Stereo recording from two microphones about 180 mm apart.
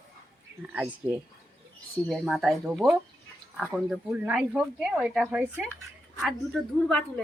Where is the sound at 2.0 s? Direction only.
Centre (ahead or behind).